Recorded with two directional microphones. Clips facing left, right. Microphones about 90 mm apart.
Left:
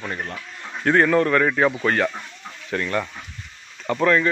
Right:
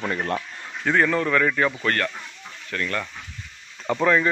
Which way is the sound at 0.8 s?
Centre (ahead or behind).